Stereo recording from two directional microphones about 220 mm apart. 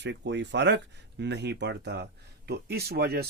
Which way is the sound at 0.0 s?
50° right (ahead or behind).